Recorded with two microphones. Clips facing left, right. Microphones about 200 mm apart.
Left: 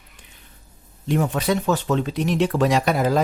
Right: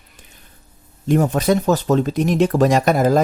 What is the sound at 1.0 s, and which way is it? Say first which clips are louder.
Speech: right 5 dB; 40° right (ahead or behind).